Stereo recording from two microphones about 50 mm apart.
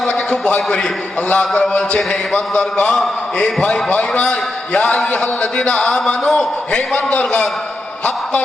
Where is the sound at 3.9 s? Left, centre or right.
Left.